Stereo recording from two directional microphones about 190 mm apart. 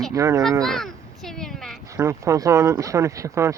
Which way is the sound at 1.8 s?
15° right (ahead or behind).